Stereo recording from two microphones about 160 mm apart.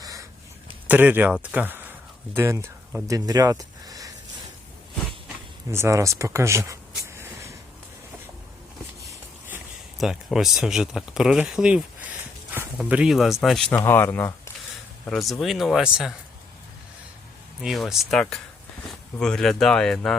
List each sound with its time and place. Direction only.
0.0 s a sound: 20° right (ahead or behind)
0.9 s speech: 10° right (ahead or behind)
5.7 s a sound: 20° right (ahead or behind)
10.0 s speech: centre (ahead or behind)
13.7 s speech: 15° left (ahead or behind)
15.0 s speech: centre (ahead or behind)
17.6 s speech: centre (ahead or behind)